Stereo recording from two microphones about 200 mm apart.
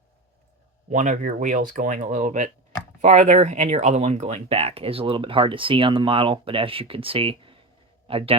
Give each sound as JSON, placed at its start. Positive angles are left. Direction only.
{"t": 0.9, "sound": "a man's voice", "side_deg": -40}